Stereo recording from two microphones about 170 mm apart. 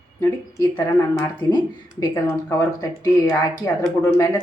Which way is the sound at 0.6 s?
20° left (ahead or behind).